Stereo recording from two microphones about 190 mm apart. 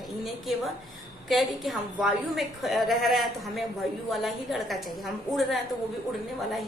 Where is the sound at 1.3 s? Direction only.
Centre (ahead or behind).